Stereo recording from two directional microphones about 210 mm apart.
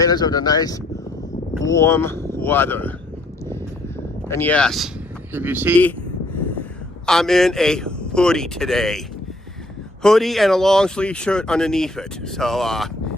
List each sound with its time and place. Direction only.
0.0 s speech: 20° left (ahead or behind)
4.3 s speech: 10° left (ahead or behind)
5.3 s speech: 10° right (ahead or behind)
7.0 s speech: centre (ahead or behind)
10.0 s speech: centre (ahead or behind)